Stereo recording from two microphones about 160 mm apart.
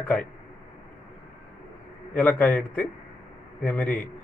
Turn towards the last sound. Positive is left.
turn(degrees=10)  # may be behind; listen again after turning